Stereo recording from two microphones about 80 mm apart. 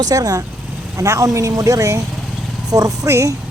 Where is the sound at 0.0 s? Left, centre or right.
Right.